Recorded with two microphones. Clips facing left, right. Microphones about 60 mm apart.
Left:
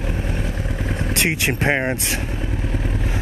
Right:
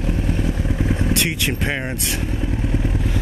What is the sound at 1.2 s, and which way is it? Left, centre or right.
Speech, left.